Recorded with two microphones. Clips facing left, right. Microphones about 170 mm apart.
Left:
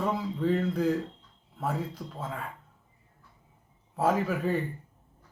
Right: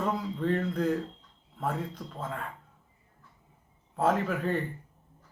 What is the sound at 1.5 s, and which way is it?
Speech, 5° left (ahead or behind).